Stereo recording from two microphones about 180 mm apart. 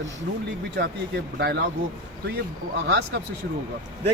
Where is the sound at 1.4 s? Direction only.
70° right (ahead or behind).